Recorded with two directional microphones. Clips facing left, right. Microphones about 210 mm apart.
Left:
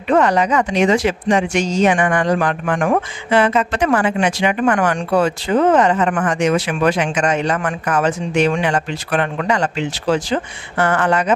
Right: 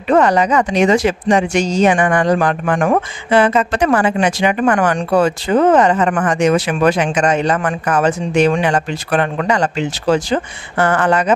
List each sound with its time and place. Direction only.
0.1 s speech: 35° right (ahead or behind)